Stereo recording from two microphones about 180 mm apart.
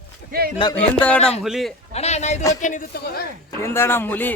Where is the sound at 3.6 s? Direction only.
15° left (ahead or behind).